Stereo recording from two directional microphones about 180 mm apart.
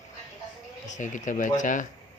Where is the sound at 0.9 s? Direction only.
45° left (ahead or behind).